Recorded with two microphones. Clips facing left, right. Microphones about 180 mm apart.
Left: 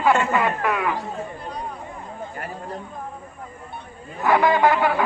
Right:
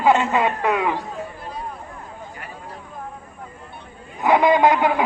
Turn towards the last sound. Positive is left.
turn(degrees=-20)  # may be behind; listen again after turning